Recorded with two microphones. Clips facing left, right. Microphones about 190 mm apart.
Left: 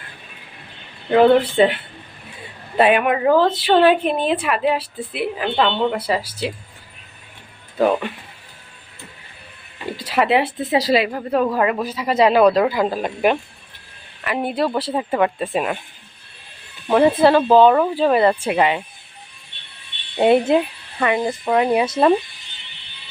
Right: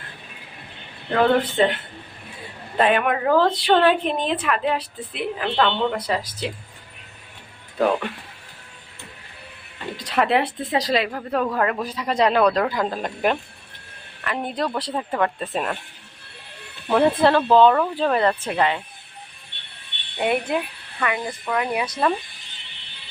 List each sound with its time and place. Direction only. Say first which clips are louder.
1.1 s a woman's voice: left 6 dB; 10° left (ahead or behind)
10.0 s a woman's voice: left 3 dB; 5° left (ahead or behind)
16.9 s a woman's voice: left 4 dB; 5° left (ahead or behind)
20.1 s a woman's voice: left 8 dB; 30° left (ahead or behind)